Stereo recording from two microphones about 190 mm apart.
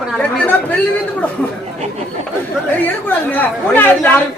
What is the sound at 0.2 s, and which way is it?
Chatter, 10° left (ahead or behind).